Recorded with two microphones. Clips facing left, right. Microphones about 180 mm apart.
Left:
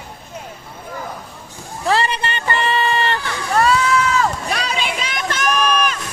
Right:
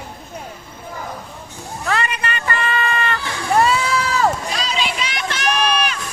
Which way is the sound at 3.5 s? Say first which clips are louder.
Left 1 dB; 25° right (ahead or behind).